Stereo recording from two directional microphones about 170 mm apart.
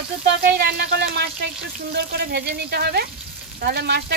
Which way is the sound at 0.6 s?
70° right (ahead or behind).